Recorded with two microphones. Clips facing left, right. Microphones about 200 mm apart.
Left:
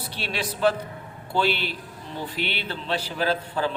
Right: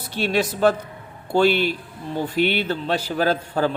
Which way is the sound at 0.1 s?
45° right (ahead or behind).